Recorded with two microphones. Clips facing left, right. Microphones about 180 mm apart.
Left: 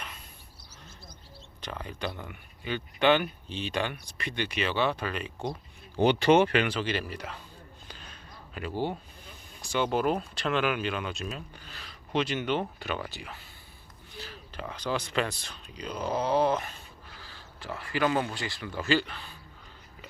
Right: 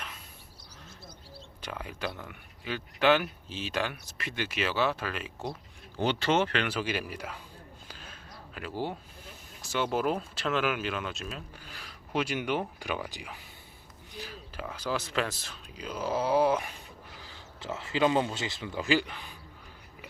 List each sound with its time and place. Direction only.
1.6 s speech: 5° right (ahead or behind)
6.0 s speech: 15° left (ahead or behind)
6.7 s speech: 10° right (ahead or behind)
7.9 s a sound: 5° right (ahead or behind)
9.6 s speech: 5° right (ahead or behind)